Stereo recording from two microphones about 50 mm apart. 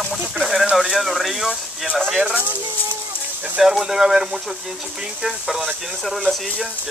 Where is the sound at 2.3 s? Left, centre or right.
Right.